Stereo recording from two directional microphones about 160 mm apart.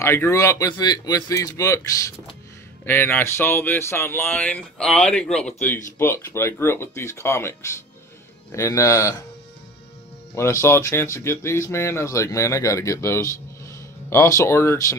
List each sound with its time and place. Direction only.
0.0 s speech: 15° left (ahead or behind)
10.3 s speech: 15° left (ahead or behind)